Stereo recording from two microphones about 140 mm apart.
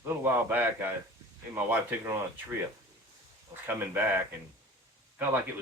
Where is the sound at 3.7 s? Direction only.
15° right (ahead or behind).